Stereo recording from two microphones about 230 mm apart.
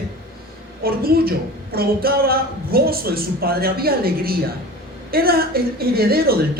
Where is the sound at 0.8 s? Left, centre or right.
Right.